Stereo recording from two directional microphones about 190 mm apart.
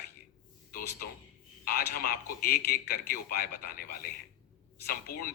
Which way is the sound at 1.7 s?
50° left (ahead or behind).